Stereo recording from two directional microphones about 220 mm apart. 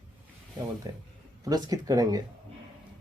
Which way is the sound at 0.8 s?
15° right (ahead or behind).